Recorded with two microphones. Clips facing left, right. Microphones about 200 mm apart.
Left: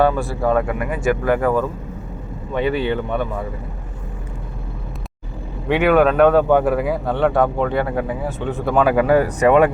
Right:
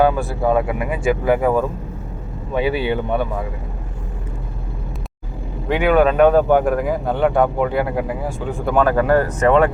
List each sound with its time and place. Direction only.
0.0 s speech: centre (ahead or behind)
5.6 s speech: centre (ahead or behind)